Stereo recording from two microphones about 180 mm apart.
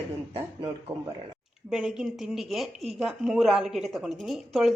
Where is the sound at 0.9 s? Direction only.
20° right (ahead or behind).